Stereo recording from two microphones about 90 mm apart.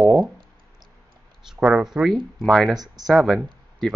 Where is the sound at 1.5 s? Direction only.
5° right (ahead or behind).